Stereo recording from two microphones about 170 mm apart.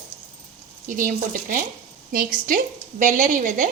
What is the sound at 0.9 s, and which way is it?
A woman's voice, 50° right (ahead or behind).